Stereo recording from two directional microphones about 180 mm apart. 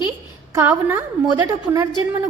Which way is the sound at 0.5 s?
10° right (ahead or behind).